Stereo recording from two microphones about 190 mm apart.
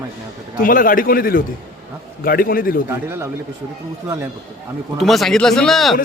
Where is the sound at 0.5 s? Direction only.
45° left (ahead or behind).